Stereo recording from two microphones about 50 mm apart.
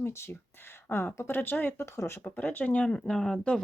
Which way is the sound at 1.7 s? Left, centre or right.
Left.